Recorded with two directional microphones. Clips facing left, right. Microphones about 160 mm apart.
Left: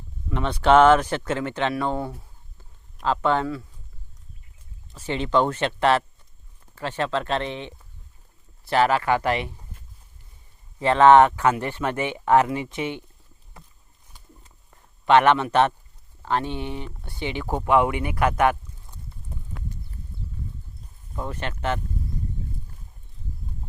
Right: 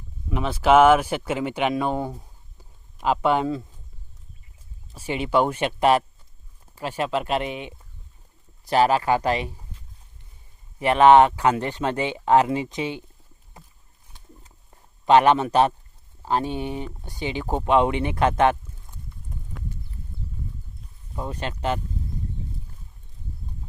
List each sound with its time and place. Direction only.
0.3 s speech: 5° right (ahead or behind)
4.9 s speech: 10° right (ahead or behind)
8.7 s speech: 15° right (ahead or behind)
10.8 s speech: 15° right (ahead or behind)
14.7 s a sound: 30° right (ahead or behind)
16.2 s speech: 10° right (ahead or behind)
21.2 s speech: 15° right (ahead or behind)